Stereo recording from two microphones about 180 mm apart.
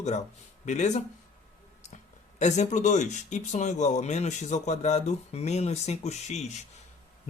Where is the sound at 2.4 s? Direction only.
40° left (ahead or behind).